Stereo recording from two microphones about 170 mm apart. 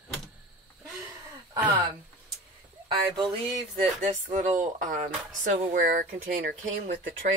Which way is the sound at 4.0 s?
45° right (ahead or behind).